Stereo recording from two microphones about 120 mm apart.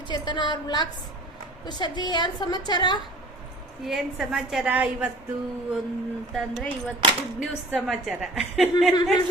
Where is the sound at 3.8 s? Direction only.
Centre (ahead or behind).